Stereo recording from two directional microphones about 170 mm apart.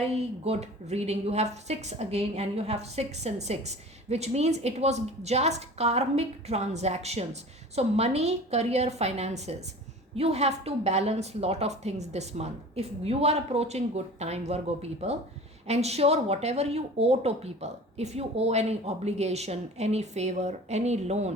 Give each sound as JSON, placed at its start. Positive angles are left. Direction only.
{"t": 0.2, "sound": "a woman's voice", "side_deg": -40}